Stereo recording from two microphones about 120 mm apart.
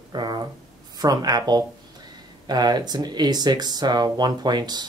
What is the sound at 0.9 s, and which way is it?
Speech, 30° right (ahead or behind).